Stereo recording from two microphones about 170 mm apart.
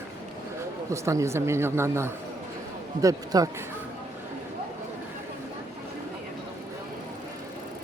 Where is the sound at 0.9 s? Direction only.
15° right (ahead or behind).